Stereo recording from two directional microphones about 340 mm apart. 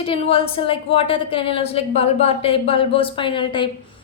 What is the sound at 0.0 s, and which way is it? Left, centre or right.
A woman's voice, centre.